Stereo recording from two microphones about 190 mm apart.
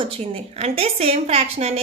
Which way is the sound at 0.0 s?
30° right (ahead or behind).